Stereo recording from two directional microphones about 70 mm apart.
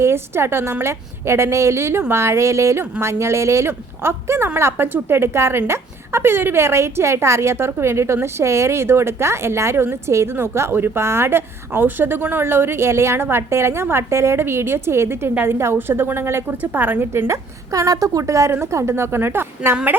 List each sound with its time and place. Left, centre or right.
0.0 s a woman's voice: right
17.7 s a woman's voice: right